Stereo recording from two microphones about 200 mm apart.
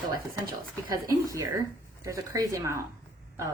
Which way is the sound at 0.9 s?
15° right (ahead or behind).